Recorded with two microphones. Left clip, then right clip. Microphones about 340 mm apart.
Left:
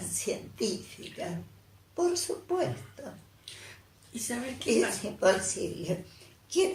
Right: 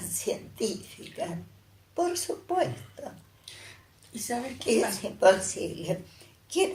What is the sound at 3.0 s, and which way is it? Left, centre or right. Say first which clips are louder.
Bathtub: right 3 dB; right.